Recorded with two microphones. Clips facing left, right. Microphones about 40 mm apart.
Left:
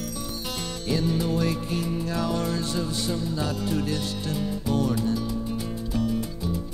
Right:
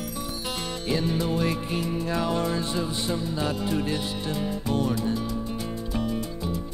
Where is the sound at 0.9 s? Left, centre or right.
Centre.